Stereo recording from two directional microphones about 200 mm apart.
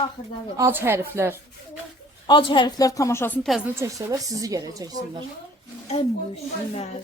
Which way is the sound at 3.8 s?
15° right (ahead or behind).